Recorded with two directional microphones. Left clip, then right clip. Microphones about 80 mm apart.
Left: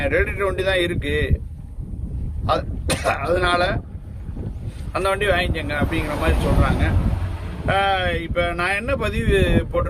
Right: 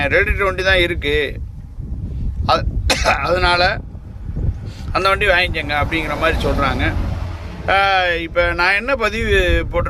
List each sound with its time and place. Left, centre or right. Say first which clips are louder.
0.0 s speech: right 5 dB; left
2.5 s speech: right 5 dB; left
4.9 s speech: right 5 dB; left